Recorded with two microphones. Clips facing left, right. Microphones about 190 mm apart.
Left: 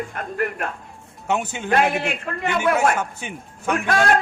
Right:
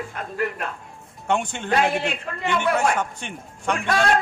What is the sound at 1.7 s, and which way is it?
A man's voice, 55° left (ahead or behind).